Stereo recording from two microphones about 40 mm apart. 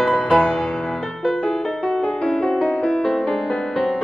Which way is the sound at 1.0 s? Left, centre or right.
Centre.